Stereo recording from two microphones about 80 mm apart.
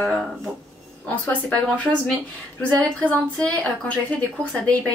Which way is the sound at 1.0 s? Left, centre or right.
Centre.